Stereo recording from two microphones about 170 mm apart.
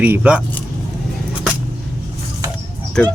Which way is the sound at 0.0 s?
10° right (ahead or behind).